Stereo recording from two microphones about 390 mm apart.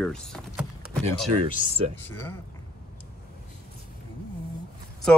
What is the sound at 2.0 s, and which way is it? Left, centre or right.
Speech, centre.